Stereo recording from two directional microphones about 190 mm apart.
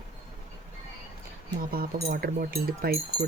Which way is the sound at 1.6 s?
50° right (ahead or behind).